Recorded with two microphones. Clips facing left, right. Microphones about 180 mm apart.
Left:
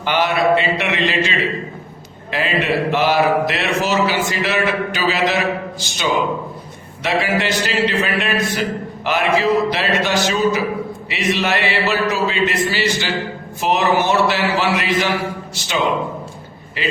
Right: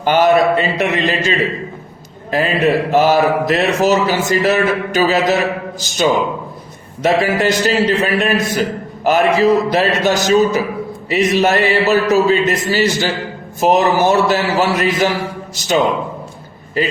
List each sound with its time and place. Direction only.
0.0 s a man's voice: 45° right (ahead or behind)
2.9 s a man's voice: 40° right (ahead or behind)